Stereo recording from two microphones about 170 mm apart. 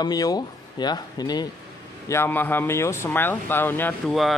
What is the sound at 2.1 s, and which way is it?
Speech, 10° left (ahead or behind).